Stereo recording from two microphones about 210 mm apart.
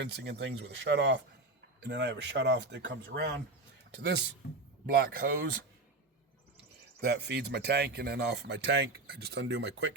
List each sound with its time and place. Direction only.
0.0 s speech: 55° right (ahead or behind)
4.9 s speech: 40° right (ahead or behind)
7.0 s speech: 50° right (ahead or behind)